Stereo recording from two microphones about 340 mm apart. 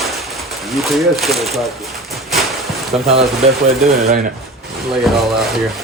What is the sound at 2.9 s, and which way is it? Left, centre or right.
Speech, centre.